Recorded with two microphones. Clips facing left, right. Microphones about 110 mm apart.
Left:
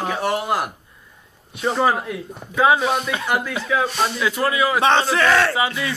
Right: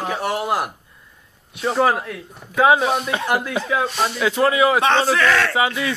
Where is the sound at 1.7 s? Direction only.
5° right (ahead or behind).